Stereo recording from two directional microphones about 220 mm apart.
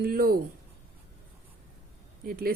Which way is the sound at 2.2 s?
40° right (ahead or behind).